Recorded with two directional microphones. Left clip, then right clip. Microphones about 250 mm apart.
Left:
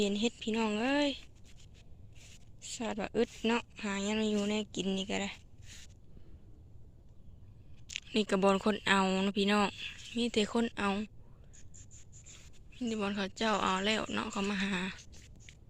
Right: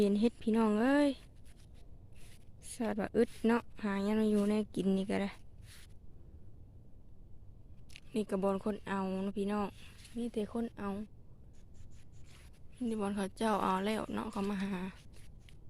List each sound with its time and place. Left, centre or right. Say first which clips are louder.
0.0 s speech: right 1 dB; right
2.6 s speech: even; right
7.9 s speech: left 5 dB; centre
12.8 s a woman's voice: left 2 dB; centre